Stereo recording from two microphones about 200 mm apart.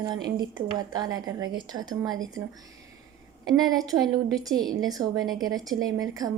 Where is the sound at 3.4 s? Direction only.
20° right (ahead or behind).